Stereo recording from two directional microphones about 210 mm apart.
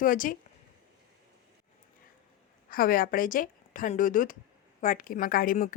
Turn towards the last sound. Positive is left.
turn(degrees=40)  # may be behind; listen again after turning